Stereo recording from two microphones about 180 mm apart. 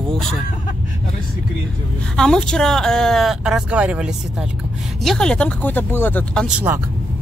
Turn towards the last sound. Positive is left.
turn(degrees=-10)  # may be behind; listen again after turning